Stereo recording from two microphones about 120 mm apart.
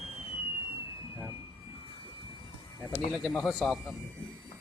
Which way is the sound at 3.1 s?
Centre (ahead or behind).